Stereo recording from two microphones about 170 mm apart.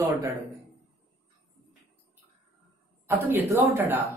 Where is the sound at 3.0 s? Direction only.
15° right (ahead or behind).